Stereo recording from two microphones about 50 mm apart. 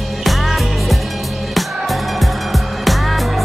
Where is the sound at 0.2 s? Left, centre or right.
Centre.